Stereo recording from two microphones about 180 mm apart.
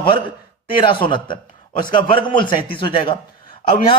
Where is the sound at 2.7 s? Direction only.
30° left (ahead or behind).